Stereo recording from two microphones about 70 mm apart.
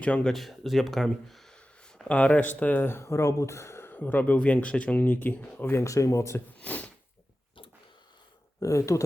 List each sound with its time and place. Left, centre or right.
0.0 s speech: centre
0.3 s speech: centre
2.0 s speech: centre
5.7 s speech: left
6.6 s a sound: left
8.6 s speech: left